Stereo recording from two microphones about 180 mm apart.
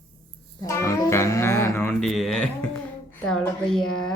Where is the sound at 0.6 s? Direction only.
15° left (ahead or behind).